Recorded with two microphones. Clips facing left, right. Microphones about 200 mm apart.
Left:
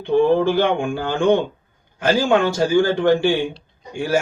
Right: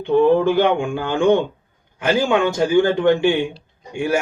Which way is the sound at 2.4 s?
20° right (ahead or behind).